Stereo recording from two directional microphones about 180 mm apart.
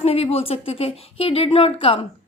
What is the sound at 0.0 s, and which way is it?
A woman's voice, 35° left (ahead or behind).